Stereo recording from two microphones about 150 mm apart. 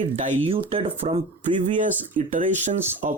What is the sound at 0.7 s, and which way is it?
Speech, 40° right (ahead or behind).